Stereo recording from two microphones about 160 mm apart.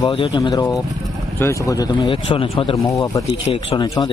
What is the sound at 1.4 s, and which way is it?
Speech, 20° left (ahead or behind).